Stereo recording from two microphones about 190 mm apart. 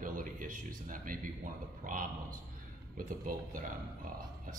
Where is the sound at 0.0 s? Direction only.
45° right (ahead or behind).